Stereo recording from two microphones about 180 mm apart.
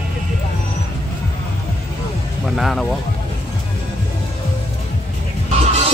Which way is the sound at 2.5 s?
Centre (ahead or behind).